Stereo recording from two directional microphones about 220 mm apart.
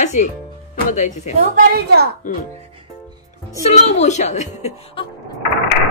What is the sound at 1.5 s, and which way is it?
Speech, 45° right (ahead or behind).